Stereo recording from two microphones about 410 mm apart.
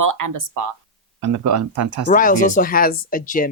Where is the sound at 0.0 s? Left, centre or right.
Right.